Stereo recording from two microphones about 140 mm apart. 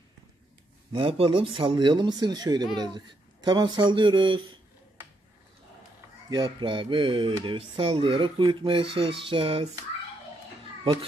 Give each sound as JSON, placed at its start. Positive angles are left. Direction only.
{"t": 0.9, "sound": "speech", "side_deg": -40}
{"t": 6.3, "sound": "speech", "side_deg": -35}
{"t": 10.8, "sound": "a child's voice", "side_deg": -40}